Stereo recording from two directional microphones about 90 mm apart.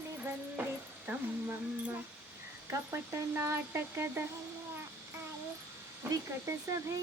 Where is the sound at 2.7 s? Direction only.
25° right (ahead or behind).